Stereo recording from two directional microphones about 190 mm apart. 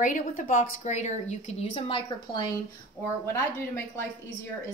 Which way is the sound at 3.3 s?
10° left (ahead or behind).